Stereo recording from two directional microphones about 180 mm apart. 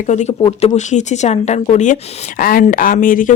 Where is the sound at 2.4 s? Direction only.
50° left (ahead or behind).